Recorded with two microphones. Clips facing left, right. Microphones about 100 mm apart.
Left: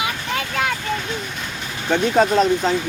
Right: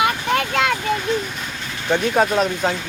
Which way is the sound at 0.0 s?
65° right (ahead or behind).